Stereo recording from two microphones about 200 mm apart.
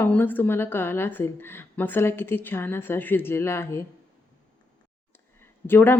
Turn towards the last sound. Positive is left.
turn(degrees=10)  # may be behind; listen again after turning